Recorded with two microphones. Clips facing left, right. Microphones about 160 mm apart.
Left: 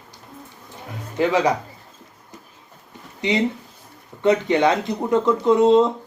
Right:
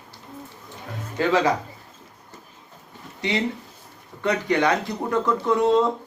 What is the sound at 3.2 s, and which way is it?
Speech, 20° left (ahead or behind).